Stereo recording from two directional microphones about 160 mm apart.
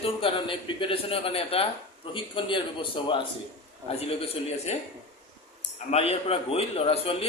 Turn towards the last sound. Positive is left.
turn(degrees=35)  # may be behind; listen again after turning